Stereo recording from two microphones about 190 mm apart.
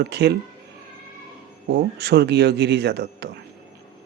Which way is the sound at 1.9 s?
60° right (ahead or behind).